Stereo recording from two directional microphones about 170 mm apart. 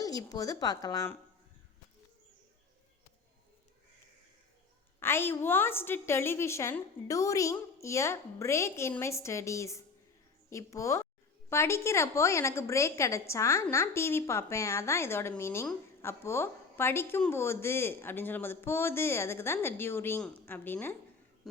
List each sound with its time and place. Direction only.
0.0 s a woman's voice: 20° left (ahead or behind)
4.9 s a woman's voice: 15° left (ahead or behind)